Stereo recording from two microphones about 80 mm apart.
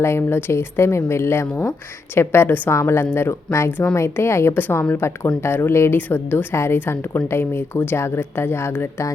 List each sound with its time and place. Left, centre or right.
0.0 s a woman's voice: left